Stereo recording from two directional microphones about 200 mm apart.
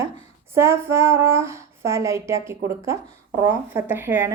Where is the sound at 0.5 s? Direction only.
15° right (ahead or behind).